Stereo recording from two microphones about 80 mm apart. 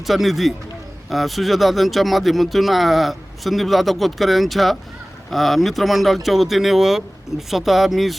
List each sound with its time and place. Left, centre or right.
0.0 s speech: centre